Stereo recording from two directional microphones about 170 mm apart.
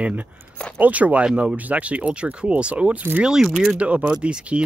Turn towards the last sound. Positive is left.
turn(degrees=-5)  # may be behind; listen again after turning